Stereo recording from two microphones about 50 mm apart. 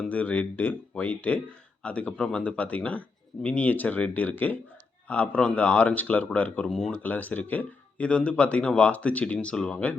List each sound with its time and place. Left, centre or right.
0.0 s speech: left